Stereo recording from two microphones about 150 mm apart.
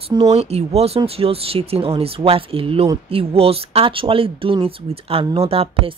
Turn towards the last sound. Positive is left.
turn(degrees=-40)  # may be behind; listen again after turning